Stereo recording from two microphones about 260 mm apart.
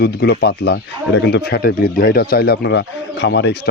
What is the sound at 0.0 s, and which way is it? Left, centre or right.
Speech, left.